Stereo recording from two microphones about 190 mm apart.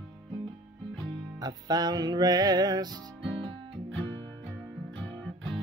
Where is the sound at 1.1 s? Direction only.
20° right (ahead or behind).